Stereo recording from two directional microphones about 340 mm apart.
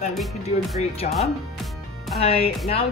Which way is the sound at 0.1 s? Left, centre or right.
Centre.